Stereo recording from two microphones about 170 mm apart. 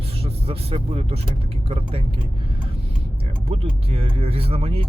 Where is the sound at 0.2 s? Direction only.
35° right (ahead or behind).